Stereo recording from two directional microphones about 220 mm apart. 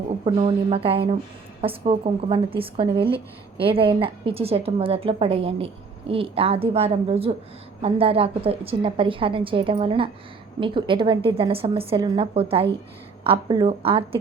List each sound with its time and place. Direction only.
0.3 s a woman's voice: 25° right (ahead or behind)